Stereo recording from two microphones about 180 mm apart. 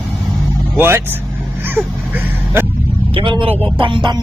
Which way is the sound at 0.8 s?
10° right (ahead or behind).